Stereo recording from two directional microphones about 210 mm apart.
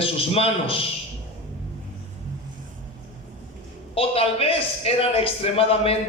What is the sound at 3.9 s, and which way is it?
Speech, 25° left (ahead or behind).